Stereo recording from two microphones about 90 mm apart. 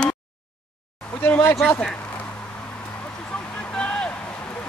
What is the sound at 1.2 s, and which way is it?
Speech, 25° left (ahead or behind).